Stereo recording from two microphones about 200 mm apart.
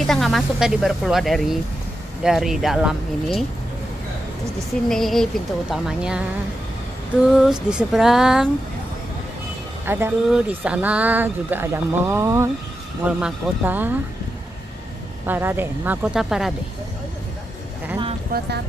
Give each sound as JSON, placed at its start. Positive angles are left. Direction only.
{"t": 0.0, "sound": "speech", "side_deg": 0}
{"t": 4.8, "sound": "speech", "side_deg": 0}
{"t": 7.3, "sound": "speech", "side_deg": -5}
{"t": 9.8, "sound": "speech", "side_deg": -10}
{"t": 15.2, "sound": "speech", "side_deg": -10}